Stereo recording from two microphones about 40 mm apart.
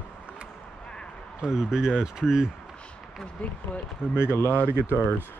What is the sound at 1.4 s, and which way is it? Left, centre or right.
Speech, centre.